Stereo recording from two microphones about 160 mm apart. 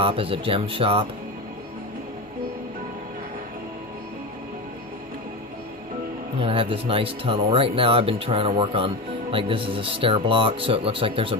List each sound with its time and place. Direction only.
0.0 s speech: 35° right (ahead or behind)
6.4 s speech: 35° right (ahead or behind)